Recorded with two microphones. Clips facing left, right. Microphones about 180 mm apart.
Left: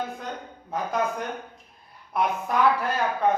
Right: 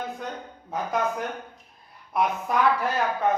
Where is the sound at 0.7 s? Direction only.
Centre (ahead or behind).